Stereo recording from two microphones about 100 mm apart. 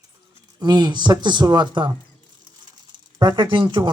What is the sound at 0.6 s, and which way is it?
Speech, 45° right (ahead or behind).